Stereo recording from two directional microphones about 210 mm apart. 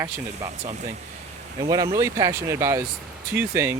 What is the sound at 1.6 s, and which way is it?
Speech, 15° right (ahead or behind).